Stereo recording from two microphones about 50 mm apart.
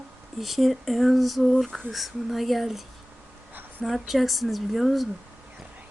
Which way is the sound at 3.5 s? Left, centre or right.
Right.